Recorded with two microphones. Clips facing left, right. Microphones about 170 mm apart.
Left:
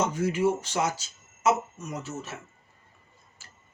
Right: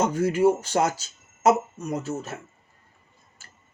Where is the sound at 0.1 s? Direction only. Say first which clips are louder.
Right 5 dB; 50° right (ahead or behind).